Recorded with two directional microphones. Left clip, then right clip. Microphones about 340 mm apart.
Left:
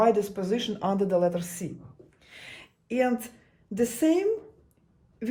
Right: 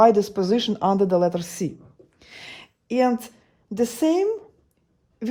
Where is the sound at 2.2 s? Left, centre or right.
Right.